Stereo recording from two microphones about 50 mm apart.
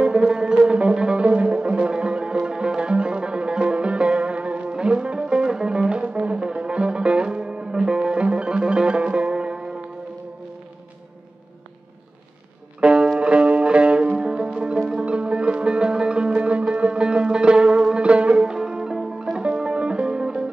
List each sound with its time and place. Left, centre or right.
0.2 s music: centre
12.8 s music: centre